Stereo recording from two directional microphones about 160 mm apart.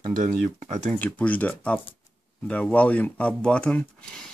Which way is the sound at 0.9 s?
10° left (ahead or behind).